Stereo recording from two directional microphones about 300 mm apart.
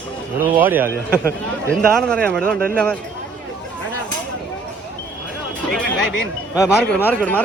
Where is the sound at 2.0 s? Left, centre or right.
Centre.